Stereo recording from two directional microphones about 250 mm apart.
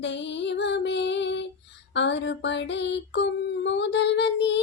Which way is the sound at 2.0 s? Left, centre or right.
Left.